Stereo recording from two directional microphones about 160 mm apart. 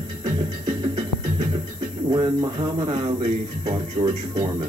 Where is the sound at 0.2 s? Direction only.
25° right (ahead or behind).